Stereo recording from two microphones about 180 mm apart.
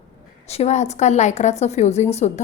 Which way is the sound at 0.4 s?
35° left (ahead or behind).